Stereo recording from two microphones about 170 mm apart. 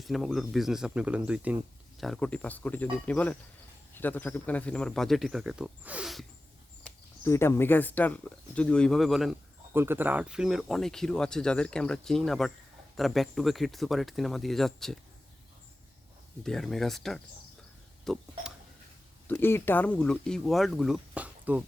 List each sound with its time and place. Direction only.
0.0 s speech: centre (ahead or behind)
2.0 s speech: 5° left (ahead or behind)
6.8 s speech: 15° left (ahead or behind)
9.7 s speech: 15° right (ahead or behind)
16.4 s speech: centre (ahead or behind)
19.3 s speech: 15° left (ahead or behind); by 21.6 s 10° right (ahead or behind)